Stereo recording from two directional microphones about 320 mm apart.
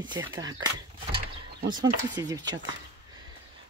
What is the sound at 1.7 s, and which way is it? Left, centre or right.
Speech, centre.